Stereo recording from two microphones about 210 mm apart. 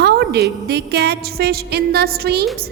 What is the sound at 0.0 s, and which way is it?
A woman's voice, 50° right (ahead or behind).